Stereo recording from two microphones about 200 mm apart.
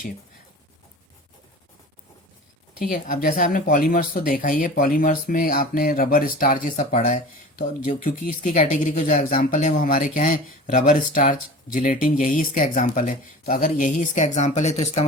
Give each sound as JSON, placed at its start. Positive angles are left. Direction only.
{"t": 2.7, "sound": "speech", "side_deg": 45}